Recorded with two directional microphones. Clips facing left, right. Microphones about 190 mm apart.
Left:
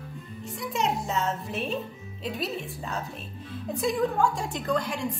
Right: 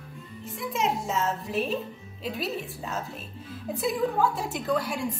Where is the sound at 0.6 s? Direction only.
Centre (ahead or behind).